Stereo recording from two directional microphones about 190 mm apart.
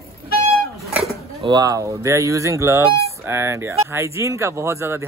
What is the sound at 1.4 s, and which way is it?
Speech, 20° right (ahead or behind).